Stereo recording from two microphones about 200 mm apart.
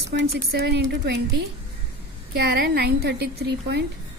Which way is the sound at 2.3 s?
55° right (ahead or behind).